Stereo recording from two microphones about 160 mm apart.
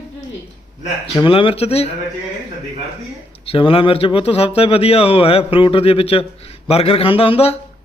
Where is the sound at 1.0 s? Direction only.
30° left (ahead or behind).